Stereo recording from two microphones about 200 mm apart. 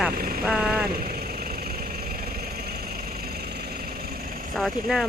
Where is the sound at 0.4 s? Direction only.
5° right (ahead or behind).